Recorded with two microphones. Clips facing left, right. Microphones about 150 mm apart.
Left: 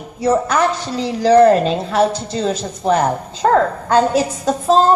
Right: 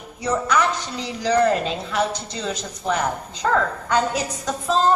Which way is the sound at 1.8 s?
35° left (ahead or behind).